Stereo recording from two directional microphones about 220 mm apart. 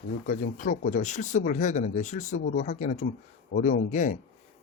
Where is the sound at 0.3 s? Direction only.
35° left (ahead or behind).